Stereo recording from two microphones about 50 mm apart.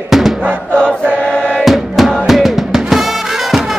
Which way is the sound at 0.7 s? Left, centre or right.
Centre.